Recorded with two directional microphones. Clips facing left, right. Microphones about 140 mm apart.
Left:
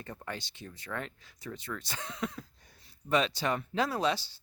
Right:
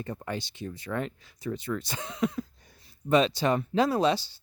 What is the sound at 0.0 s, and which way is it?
Speech, 20° right (ahead or behind).